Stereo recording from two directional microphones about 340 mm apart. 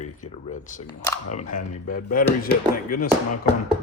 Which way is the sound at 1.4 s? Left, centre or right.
Left.